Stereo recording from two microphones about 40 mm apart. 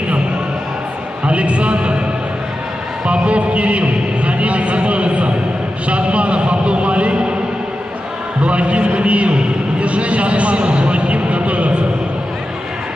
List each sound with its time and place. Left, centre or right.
1.2 s a man's voice: right
3.1 s a man's voice: right
8.5 s a man's voice: right